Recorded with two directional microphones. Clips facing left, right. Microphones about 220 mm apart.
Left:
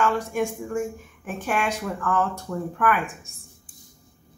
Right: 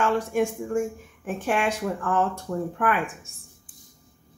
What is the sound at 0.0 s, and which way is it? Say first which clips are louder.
Speech: right 1 dB; 30° right (ahead or behind).